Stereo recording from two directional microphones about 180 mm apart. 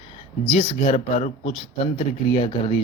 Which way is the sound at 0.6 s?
40° left (ahead or behind).